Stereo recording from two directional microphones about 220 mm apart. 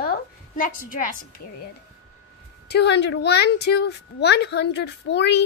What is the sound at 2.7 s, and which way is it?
A woman's voice, 50° left (ahead or behind).